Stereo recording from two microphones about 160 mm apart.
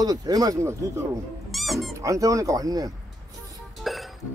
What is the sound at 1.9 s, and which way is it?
Speech, 20° right (ahead or behind).